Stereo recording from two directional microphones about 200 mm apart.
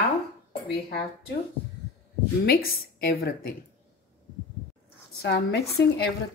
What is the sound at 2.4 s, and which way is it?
Speech, 50° left (ahead or behind).